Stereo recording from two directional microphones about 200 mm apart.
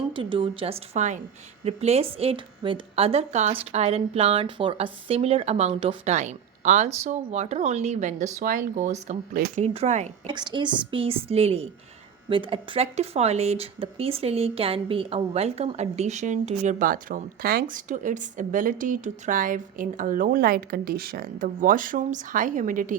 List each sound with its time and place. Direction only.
0.1 s a woman's voice: 25° right (ahead or behind)
10.2 s a woman's voice: 25° right (ahead or behind); by 23.0 s 40° right (ahead or behind)